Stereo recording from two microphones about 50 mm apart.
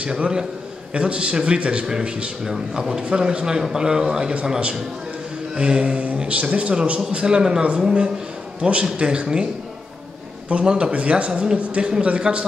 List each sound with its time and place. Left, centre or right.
0.0 s a man's voice: centre
10.5 s a man's voice: centre